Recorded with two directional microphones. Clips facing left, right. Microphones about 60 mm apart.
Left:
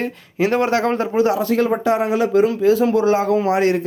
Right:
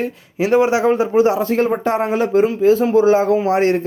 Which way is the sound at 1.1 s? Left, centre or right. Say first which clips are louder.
Right 2 dB; right.